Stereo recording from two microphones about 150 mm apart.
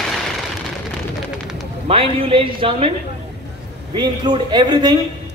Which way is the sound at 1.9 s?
40° right (ahead or behind).